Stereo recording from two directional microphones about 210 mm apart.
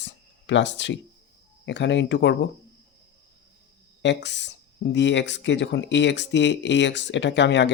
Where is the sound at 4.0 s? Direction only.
55° left (ahead or behind).